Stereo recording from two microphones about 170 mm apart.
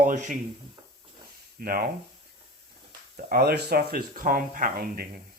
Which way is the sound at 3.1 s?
65° right (ahead or behind).